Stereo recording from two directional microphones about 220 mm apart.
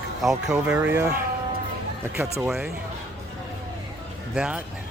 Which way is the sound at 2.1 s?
5° right (ahead or behind).